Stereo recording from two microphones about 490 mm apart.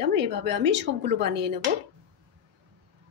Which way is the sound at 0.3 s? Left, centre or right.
Right.